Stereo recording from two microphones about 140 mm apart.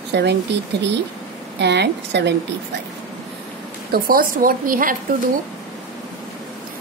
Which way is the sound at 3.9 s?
90° right.